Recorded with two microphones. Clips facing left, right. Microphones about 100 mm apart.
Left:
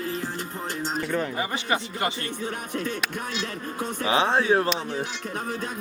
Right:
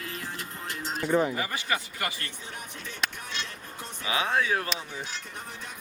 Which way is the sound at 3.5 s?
85° left.